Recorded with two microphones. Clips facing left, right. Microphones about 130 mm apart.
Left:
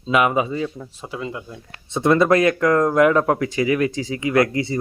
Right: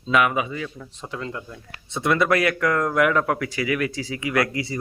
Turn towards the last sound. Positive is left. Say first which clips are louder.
# left 5 dB
turn(degrees=25)  # may be behind; listen again after turning